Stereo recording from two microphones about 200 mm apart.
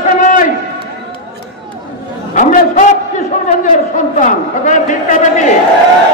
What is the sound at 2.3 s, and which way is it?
A man's voice, 40° left (ahead or behind).